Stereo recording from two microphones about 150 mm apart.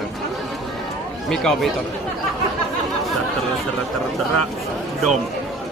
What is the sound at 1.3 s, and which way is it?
Speech, 5° left (ahead or behind).